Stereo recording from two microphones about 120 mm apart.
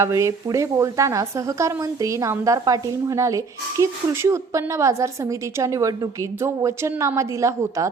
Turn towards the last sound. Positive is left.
turn(degrees=-25)  # may be behind; listen again after turning